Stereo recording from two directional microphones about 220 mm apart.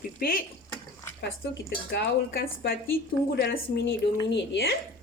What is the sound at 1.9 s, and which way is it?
A woman's voice, 45° left (ahead or behind).